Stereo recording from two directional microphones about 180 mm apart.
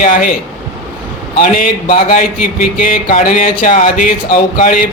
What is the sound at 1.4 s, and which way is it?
Speech, 50° left (ahead or behind).